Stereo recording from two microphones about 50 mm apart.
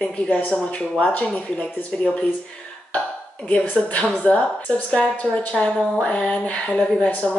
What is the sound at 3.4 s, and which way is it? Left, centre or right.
Speech, left.